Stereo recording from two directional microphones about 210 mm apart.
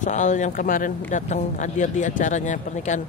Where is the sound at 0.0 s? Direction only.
35° left (ahead or behind).